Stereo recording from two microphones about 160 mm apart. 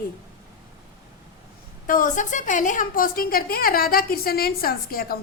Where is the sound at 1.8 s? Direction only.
60° left (ahead or behind).